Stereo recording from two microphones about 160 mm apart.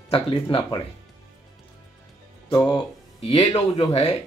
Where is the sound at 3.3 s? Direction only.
25° left (ahead or behind).